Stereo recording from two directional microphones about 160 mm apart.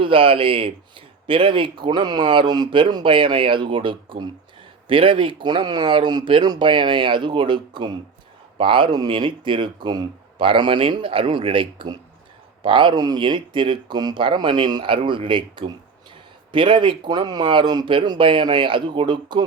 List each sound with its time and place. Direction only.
0.0 s speech: 35° right (ahead or behind)